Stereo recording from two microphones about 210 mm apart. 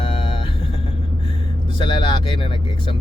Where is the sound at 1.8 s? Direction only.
20° left (ahead or behind).